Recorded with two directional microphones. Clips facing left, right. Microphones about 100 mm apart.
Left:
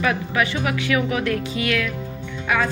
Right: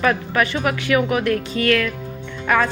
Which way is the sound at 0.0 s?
50° right (ahead or behind).